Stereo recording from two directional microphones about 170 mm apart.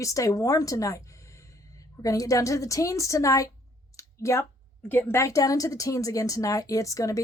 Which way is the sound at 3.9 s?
15° left (ahead or behind).